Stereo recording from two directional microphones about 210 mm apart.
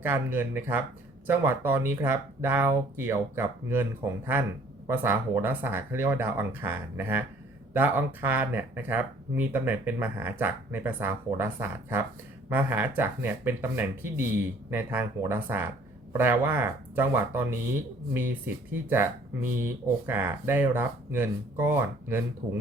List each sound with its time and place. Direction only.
0.0 s speech: 10° right (ahead or behind)
4.9 s speech: 10° right (ahead or behind)
12.5 s speech: 10° right (ahead or behind)